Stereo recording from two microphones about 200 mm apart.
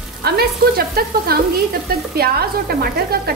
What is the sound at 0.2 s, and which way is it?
A woman's voice, 50° right (ahead or behind).